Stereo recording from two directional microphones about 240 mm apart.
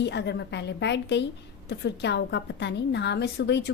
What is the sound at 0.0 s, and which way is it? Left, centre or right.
A woman's voice, left.